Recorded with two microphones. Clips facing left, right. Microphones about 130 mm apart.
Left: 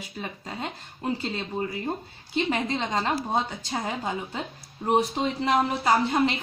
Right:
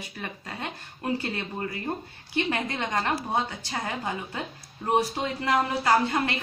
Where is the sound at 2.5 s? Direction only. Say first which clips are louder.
Left 2 dB; 20° left (ahead or behind).